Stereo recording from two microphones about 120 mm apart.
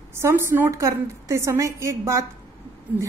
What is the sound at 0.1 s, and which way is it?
A woman's voice, 20° right (ahead or behind).